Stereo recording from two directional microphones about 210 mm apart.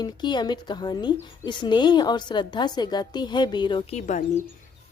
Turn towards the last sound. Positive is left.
turn(degrees=35)  # may be behind; listen again after turning